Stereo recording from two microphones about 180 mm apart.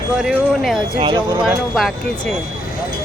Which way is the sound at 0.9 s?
30° right (ahead or behind).